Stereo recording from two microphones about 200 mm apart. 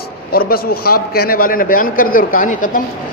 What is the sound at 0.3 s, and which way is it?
A man's voice, 50° left (ahead or behind).